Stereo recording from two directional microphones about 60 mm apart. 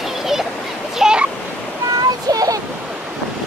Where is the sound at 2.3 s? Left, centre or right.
Right.